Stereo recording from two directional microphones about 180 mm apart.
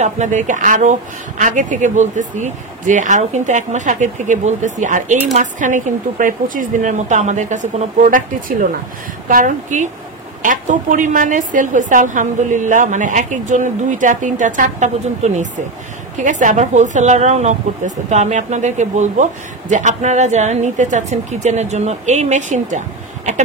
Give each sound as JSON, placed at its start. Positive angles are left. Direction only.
{"t": 0.0, "sound": "a woman's voice", "side_deg": -40}